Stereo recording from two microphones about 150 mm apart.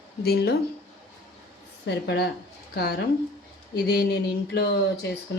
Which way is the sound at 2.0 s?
90° left.